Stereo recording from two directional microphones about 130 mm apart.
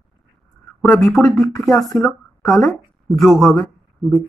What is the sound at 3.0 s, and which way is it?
Speech, centre (ahead or behind).